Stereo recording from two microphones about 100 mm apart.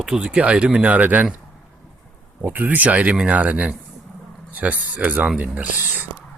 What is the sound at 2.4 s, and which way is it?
Speech, 15° right (ahead or behind).